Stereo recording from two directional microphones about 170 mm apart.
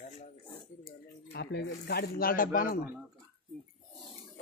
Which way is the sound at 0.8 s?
70° left (ahead or behind).